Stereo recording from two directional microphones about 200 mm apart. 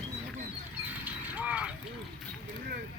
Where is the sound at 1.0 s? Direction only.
5° right (ahead or behind).